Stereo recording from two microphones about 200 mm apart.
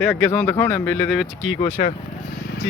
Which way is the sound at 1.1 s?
Centre (ahead or behind).